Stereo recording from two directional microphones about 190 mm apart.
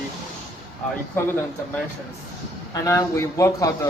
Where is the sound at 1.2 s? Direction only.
10° left (ahead or behind).